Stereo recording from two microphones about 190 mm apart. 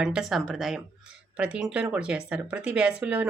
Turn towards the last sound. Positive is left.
turn(degrees=-5)  # may be behind; listen again after turning